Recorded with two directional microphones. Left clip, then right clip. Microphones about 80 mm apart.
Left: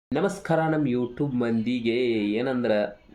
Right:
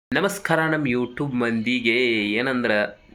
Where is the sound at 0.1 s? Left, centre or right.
Centre.